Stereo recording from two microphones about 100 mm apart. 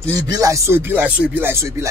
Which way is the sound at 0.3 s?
35° right (ahead or behind).